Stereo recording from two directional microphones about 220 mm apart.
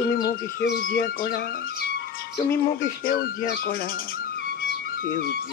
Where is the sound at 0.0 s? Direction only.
40° left (ahead or behind).